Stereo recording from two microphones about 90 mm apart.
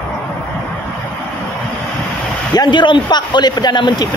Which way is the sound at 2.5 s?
55° left (ahead or behind).